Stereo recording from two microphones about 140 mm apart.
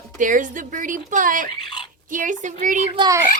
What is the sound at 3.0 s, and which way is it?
Speech, 25° right (ahead or behind).